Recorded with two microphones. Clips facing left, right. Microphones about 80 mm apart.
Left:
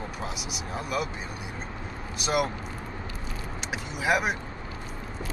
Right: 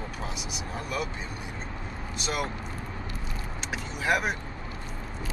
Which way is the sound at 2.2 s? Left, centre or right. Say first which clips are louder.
Left 5 dB; centre.